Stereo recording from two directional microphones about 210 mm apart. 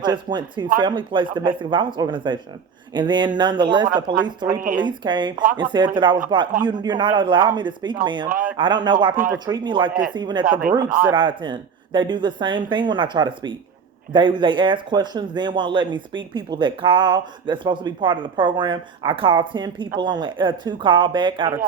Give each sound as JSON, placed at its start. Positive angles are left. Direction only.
{"t": 0.0, "sound": "speech", "side_deg": -20}
{"t": 10.4, "sound": "speech", "side_deg": -40}
{"t": 11.1, "sound": "speech", "side_deg": -25}